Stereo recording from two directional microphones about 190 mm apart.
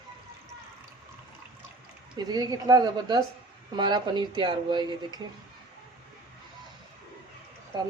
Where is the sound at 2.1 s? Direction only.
20° right (ahead or behind).